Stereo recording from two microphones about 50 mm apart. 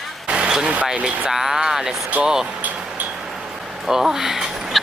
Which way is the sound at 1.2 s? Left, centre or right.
Centre.